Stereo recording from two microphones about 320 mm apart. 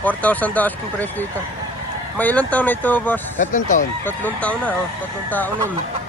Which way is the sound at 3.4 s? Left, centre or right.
Left.